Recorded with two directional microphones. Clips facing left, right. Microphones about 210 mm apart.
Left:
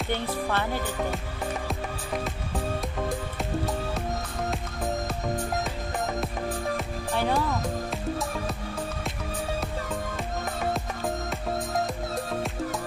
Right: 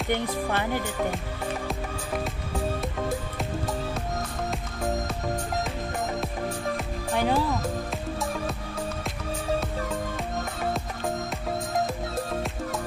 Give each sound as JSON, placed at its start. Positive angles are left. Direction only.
{"t": 0.1, "sound": "speech", "side_deg": -15}
{"t": 2.2, "sound": "music", "side_deg": 0}
{"t": 7.2, "sound": "music", "side_deg": -15}
{"t": 7.9, "sound": "music", "side_deg": 0}
{"t": 9.6, "sound": "music", "side_deg": 0}